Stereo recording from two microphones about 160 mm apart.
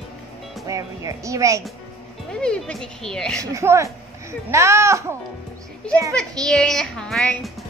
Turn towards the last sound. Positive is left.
turn(degrees=0)  # may be behind; listen again after turning